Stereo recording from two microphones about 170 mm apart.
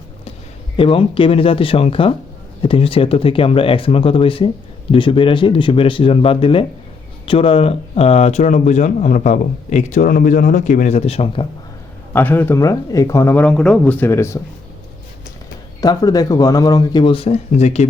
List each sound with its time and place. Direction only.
0.8 s speech: 30° left (ahead or behind)
12.1 s speech: 10° left (ahead or behind)
15.8 s speech: 25° left (ahead or behind); by 17.8 s 40° left (ahead or behind)